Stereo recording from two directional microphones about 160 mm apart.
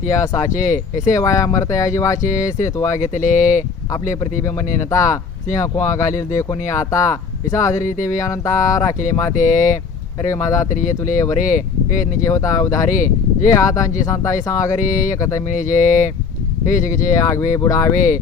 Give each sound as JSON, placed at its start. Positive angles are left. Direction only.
{"t": 0.1, "sound": "speech", "side_deg": 20}
{"t": 0.5, "sound": "speech", "side_deg": 50}
{"t": 1.1, "sound": "speech", "side_deg": 20}
{"t": 3.0, "sound": "speech", "side_deg": 50}
{"t": 4.1, "sound": "speech", "side_deg": 20}
{"t": 9.3, "sound": "speech", "side_deg": 55}
{"t": 10.2, "sound": "speech", "side_deg": 20}
{"t": 10.7, "sound": "speech", "side_deg": 50}
{"t": 12.3, "sound": "speech", "side_deg": 20}
{"t": 14.8, "sound": "speech", "side_deg": 50}
{"t": 17.5, "sound": "speech", "side_deg": 20}